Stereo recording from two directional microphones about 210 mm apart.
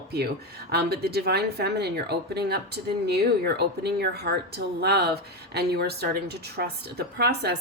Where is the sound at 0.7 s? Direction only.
50° right (ahead or behind).